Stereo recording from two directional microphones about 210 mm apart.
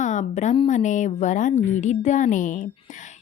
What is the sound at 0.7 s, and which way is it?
A woman's voice, 35° left (ahead or behind).